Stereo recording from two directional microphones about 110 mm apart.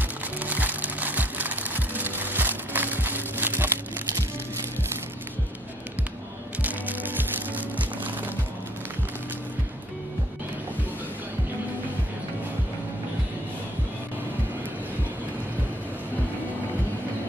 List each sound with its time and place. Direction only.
0.4 s music: 15° right (ahead or behind)
6.6 s music: 15° right (ahead or behind)